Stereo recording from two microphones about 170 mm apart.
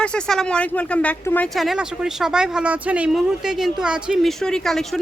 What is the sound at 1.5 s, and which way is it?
Speech, centre (ahead or behind).